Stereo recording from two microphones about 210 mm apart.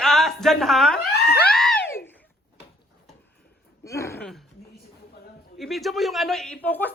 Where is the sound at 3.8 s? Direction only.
15° left (ahead or behind).